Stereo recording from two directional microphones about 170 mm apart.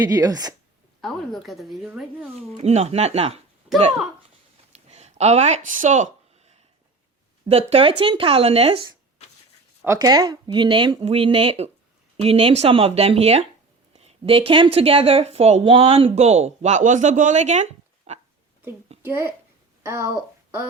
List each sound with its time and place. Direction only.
0.0 s speech: 20° right (ahead or behind)
1.0 s a woman's voice: centre (ahead or behind)
2.6 s speech: 40° right (ahead or behind)
4.7 s speech: 40° right (ahead or behind)
7.4 s speech: 35° right (ahead or behind)
9.8 s speech: 20° right (ahead or behind); by 18.2 s 40° right (ahead or behind)
19.0 s a child's voice: 15° right (ahead or behind)